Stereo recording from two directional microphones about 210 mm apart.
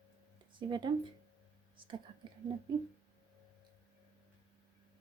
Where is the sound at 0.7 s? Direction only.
20° right (ahead or behind).